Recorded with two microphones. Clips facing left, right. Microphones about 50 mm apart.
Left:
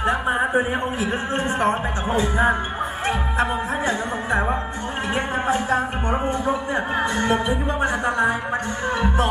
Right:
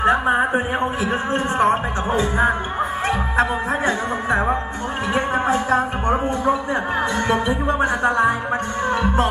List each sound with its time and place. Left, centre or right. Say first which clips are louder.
1.0 s music: right 2 dB; right
5.7 s music: right 3 dB; right
7.8 s music: right 3 dB; right